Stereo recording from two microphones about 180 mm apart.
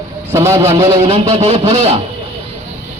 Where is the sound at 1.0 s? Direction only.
35° right (ahead or behind).